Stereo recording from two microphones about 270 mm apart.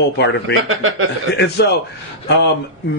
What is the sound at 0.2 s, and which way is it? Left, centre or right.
Speech, left.